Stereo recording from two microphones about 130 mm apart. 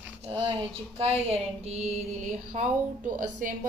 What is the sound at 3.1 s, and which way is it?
Speech, 90° right.